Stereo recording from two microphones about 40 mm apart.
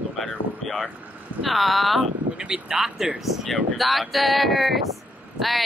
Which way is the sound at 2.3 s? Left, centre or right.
Right.